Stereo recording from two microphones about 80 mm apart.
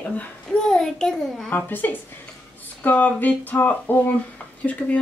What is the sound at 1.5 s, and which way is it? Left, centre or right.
A woman's voice, left.